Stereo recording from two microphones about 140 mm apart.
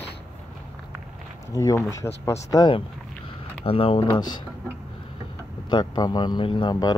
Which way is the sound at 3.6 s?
40° left (ahead or behind).